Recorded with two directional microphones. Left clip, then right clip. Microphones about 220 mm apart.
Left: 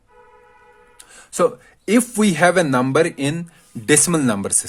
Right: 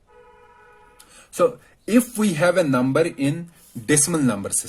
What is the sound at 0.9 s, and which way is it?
Speech, 40° left (ahead or behind).